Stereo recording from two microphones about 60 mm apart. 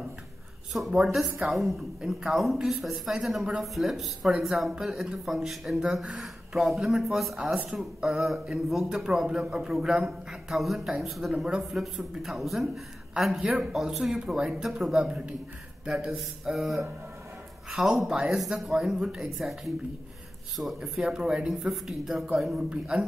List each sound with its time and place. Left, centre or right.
0.7 s speech: centre
7.3 s speech: centre
16.2 s speech: centre